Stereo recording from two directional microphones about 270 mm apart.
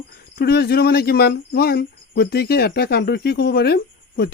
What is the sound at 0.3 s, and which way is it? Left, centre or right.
Speech, left.